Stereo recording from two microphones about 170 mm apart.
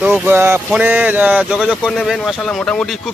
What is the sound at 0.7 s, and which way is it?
Speech, 10° right (ahead or behind).